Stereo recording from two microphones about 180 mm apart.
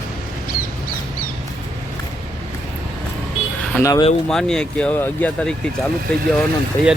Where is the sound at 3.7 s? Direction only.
15° left (ahead or behind).